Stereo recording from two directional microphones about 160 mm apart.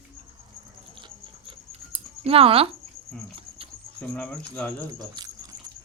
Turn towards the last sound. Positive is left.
turn(degrees=-25)  # may be behind; listen again after turning